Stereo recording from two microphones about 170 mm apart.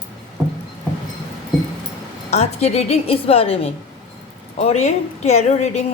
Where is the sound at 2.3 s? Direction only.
40° left (ahead or behind).